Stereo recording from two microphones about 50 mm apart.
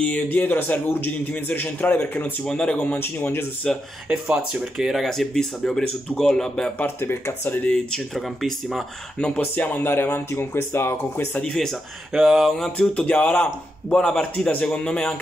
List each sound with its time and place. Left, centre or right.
0.0 s a man's voice: left
2.4 s a man's voice: centre
2.9 s speech: left
3.6 s speech: centre
4.1 s speech: right
4.7 s speech: centre
7.0 s speech: left
7.7 s speech: centre
9.3 s speech: left
11.4 s speech: centre
13.0 s a man's voice: left